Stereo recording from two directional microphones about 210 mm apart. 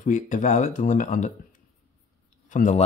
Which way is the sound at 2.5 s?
35° left (ahead or behind).